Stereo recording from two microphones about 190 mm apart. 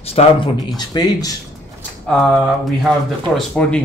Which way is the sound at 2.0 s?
5° left (ahead or behind).